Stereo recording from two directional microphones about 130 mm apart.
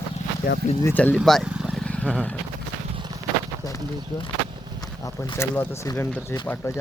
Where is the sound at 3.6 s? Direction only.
30° left (ahead or behind).